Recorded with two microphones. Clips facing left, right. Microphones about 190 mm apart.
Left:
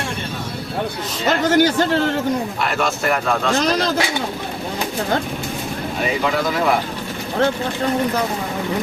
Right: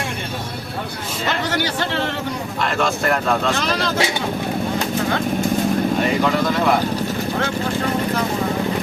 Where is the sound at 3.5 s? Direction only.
40° left (ahead or behind).